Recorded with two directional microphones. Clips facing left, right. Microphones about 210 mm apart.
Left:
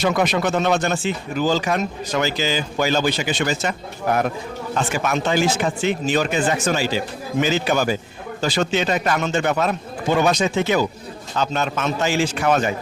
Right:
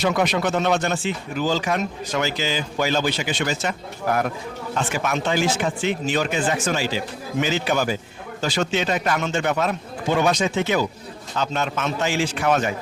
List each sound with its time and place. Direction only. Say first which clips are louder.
0.0 s speech: left 1 dB; 45° left (ahead or behind)
4.0 s speech: left 2 dB; 20° left (ahead or behind)
4.7 s speech: left 2 dB; 40° left (ahead or behind)